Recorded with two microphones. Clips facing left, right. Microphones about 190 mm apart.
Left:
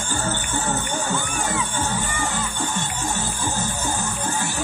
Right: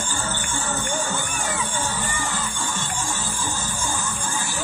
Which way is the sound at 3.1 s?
60° left (ahead or behind).